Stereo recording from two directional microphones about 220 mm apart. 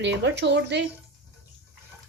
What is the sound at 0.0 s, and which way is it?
Speech, 50° right (ahead or behind).